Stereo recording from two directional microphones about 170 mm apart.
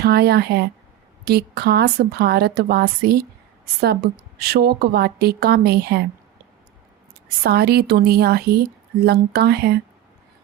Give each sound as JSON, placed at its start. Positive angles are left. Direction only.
{"t": 0.0, "sound": "a woman's voice", "side_deg": -70}
{"t": 4.4, "sound": "a woman's voice", "side_deg": -65}
{"t": 7.4, "sound": "a woman's voice", "side_deg": -70}